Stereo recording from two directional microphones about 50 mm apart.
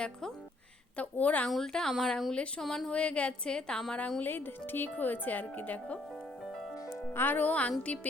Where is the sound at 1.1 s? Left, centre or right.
Left.